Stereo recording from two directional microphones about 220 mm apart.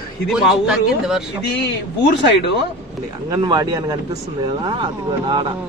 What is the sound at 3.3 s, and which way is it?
Speech, 15° right (ahead or behind).